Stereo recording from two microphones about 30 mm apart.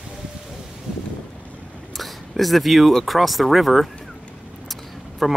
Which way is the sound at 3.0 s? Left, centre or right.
Centre.